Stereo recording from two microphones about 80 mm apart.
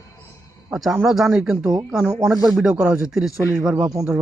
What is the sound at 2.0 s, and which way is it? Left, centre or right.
Speech, right.